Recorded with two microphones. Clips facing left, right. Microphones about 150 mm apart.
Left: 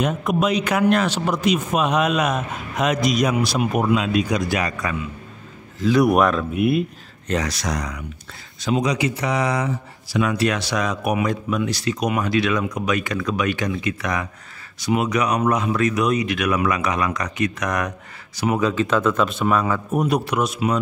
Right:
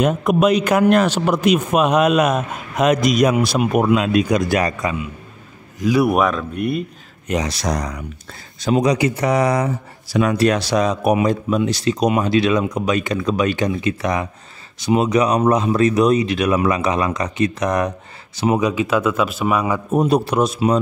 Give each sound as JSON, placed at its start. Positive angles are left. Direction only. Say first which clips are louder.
{"t": 0.0, "sound": "speech", "louder": "right 5 dB", "side_deg": -55}
{"t": 3.5, "sound": "speech", "louder": "right 4 dB", "side_deg": -60}
{"t": 5.8, "sound": "speech", "louder": "even", "side_deg": -10}
{"t": 7.4, "sound": "a man's voice", "louder": "right 3 dB", "side_deg": -35}
{"t": 19.9, "sound": "a man's voice", "louder": "right 7 dB", "side_deg": -30}